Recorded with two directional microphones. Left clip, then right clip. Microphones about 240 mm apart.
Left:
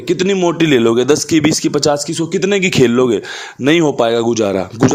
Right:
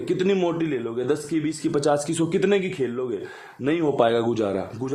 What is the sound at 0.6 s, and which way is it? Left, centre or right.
A man's voice, left.